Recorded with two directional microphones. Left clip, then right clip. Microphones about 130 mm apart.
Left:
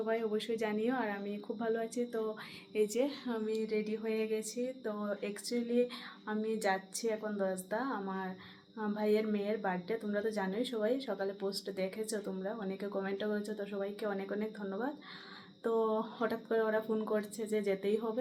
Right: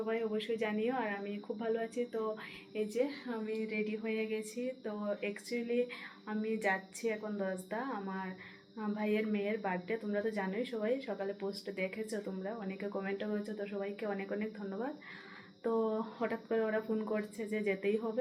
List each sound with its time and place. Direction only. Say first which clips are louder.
0.0 s speech: left 1 dB; 25° left (ahead or behind)
2.7 s a woman's voice: left 3 dB; 55° left (ahead or behind); by 14.8 s 30° left (ahead or behind)
15.6 s a woman's voice: left 2 dB; 40° left (ahead or behind)